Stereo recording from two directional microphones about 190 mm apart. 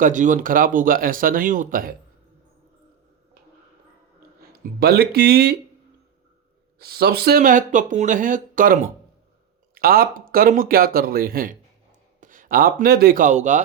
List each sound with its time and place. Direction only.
0.0 s speech: 40° right (ahead or behind)
4.5 s speech: 55° right (ahead or behind)
6.7 s a man's voice: 55° right (ahead or behind); by 13.6 s 40° right (ahead or behind)